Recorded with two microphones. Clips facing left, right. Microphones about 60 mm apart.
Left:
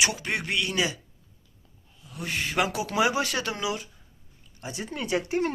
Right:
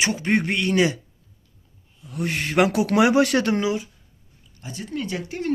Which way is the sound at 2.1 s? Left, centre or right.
Right.